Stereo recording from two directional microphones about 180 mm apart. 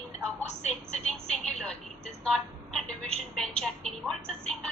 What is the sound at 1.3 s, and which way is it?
A woman's voice, 5° left (ahead or behind).